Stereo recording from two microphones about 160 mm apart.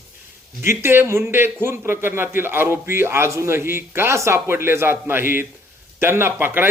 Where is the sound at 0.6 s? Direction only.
15° right (ahead or behind).